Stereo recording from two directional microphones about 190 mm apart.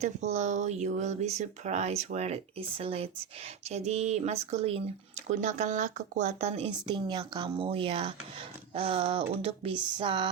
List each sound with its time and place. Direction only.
0.0 s speech: 35° right (ahead or behind)